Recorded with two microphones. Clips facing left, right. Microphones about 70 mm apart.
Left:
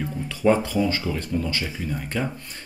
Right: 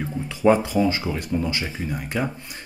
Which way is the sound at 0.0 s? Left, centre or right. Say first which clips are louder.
Right 2 dB; centre.